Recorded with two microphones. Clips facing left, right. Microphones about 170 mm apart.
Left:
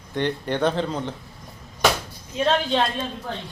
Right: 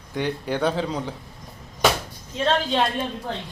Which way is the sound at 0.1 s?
5° right (ahead or behind).